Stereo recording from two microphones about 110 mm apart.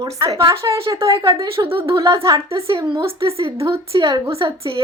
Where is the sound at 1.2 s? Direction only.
25° right (ahead or behind).